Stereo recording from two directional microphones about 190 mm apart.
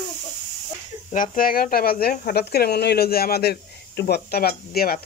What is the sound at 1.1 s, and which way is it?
Speech, 45° left (ahead or behind).